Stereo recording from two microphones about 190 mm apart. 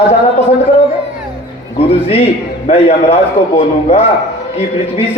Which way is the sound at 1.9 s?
30° left (ahead or behind).